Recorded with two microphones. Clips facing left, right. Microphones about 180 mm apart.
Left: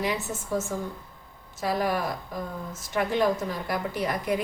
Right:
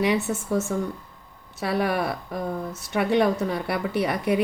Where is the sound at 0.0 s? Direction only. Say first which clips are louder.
Right 6 dB; 70° right (ahead or behind).